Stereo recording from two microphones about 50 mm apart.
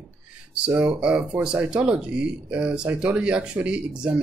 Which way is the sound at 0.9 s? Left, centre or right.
Centre.